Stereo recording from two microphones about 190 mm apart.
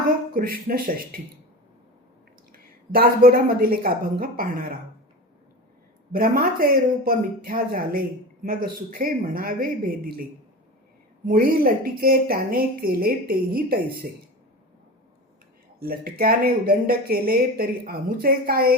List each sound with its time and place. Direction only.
0.3 s speech: 50° right (ahead or behind)
2.5 s a woman's voice: 50° right (ahead or behind)
6.1 s speech: 50° right (ahead or behind)
11.3 s speech: 50° right (ahead or behind)
15.8 s speech: 50° right (ahead or behind)